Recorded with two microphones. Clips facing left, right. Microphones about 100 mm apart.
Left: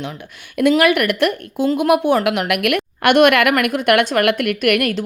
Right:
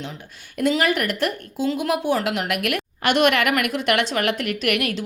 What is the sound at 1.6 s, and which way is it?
A woman's voice, 55° left (ahead or behind).